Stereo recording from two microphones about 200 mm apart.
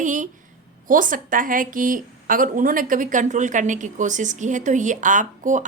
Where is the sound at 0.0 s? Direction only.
40° right (ahead or behind).